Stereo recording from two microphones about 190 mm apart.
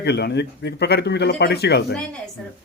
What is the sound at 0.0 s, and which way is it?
Speech, 60° left (ahead or behind).